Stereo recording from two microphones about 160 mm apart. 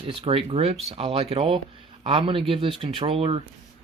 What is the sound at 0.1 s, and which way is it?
Speech, 35° right (ahead or behind).